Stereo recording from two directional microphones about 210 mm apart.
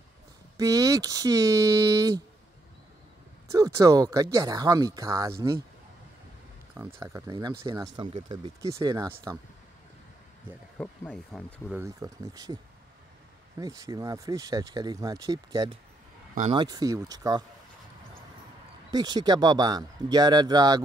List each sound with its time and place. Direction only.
0.6 s speech: 15° right (ahead or behind)
3.5 s speech: 15° right (ahead or behind)
7.0 s speech: 15° right (ahead or behind)
10.8 s speech: 5° left (ahead or behind)
11.7 s speech: 15° right (ahead or behind)
13.6 s speech: 15° right (ahead or behind)
18.9 s speech: 20° right (ahead or behind)